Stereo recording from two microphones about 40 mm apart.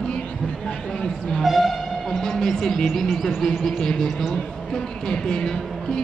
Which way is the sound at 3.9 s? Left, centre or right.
Centre.